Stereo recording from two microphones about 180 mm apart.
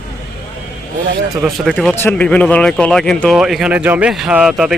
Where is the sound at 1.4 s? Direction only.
Centre (ahead or behind).